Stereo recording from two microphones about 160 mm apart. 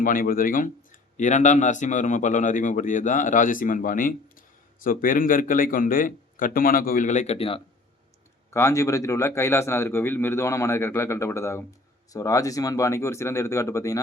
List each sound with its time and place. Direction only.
0.0 s a man's voice: 60° left (ahead or behind); by 7.6 s 35° left (ahead or behind)
8.4 s a man's voice: 20° left (ahead or behind)